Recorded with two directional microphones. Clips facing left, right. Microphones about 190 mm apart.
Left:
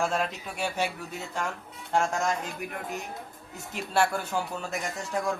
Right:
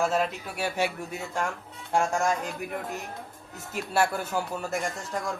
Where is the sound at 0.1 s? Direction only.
5° right (ahead or behind).